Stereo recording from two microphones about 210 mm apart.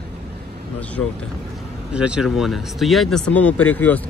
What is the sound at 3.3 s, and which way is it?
Speech, 90° left.